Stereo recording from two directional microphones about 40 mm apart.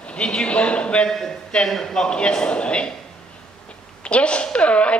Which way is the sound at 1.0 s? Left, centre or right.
Centre.